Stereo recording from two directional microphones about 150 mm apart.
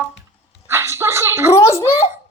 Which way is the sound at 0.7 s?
15° right (ahead or behind).